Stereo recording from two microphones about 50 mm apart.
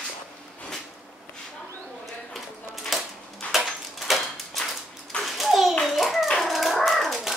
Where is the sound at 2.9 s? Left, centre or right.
Centre.